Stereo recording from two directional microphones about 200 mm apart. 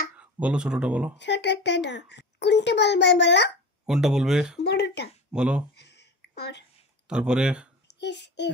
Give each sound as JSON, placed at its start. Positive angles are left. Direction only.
{"t": 0.2, "sound": "speech", "side_deg": -5}
{"t": 1.1, "sound": "a child's voice", "side_deg": 60}
{"t": 3.8, "sound": "speech", "side_deg": -5}
{"t": 4.6, "sound": "speech", "side_deg": 55}
{"t": 5.3, "sound": "speech", "side_deg": -5}
{"t": 5.8, "sound": "a sound", "side_deg": 60}
{"t": 7.1, "sound": "speech", "side_deg": -5}
{"t": 8.0, "sound": "a child's voice", "side_deg": 60}